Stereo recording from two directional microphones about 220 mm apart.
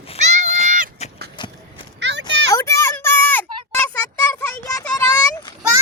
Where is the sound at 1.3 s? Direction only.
20° left (ahead or behind).